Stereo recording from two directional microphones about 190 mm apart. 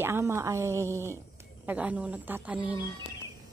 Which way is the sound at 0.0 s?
15° right (ahead or behind).